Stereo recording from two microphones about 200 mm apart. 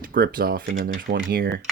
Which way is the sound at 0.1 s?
45° right (ahead or behind).